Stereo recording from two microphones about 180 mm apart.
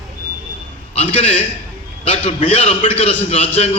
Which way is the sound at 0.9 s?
30° left (ahead or behind).